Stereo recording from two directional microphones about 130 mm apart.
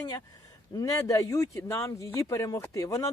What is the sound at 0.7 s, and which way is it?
Speech, 25° left (ahead or behind).